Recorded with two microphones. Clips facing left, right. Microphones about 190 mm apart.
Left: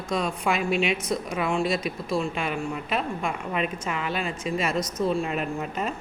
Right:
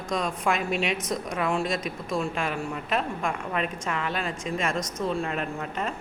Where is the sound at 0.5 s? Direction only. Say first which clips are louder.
Left 3 dB; 40° right (ahead or behind).